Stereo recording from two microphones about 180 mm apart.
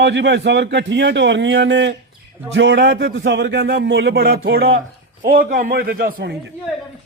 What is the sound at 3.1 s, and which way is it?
A man's voice, 90° right.